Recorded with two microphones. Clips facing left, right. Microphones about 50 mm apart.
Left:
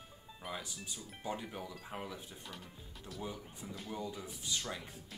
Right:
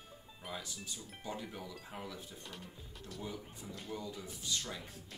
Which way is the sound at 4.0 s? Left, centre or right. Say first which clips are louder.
Left 2 dB; left.